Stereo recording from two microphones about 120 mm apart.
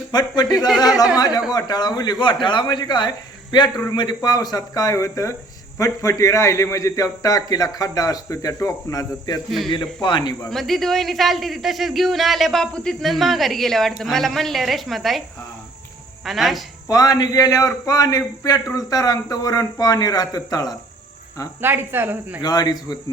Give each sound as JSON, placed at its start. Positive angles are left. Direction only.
{"t": 0.1, "sound": "a man's voice", "side_deg": 35}
{"t": 9.6, "sound": "speech", "side_deg": 40}
{"t": 10.5, "sound": "a man's voice", "side_deg": 0}
{"t": 16.2, "sound": "a man's voice", "side_deg": 0}
{"t": 16.9, "sound": "speech", "side_deg": 30}
{"t": 21.6, "sound": "speech", "side_deg": -20}
{"t": 22.4, "sound": "speech", "side_deg": 35}